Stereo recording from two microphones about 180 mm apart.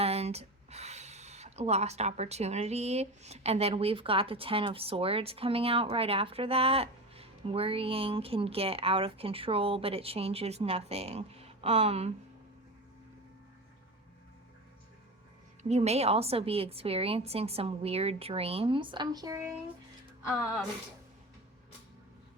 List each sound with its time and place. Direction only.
0.0 s speech: 35° right (ahead or behind)
15.6 s speech: 35° right (ahead or behind); by 19.5 s 20° right (ahead or behind)